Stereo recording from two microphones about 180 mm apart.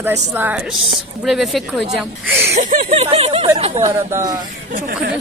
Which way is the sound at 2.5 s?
40° right (ahead or behind).